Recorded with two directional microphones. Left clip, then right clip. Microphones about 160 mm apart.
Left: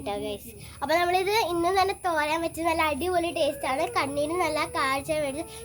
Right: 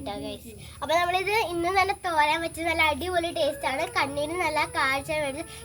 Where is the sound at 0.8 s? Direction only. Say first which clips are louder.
Even; 40° left (ahead or behind).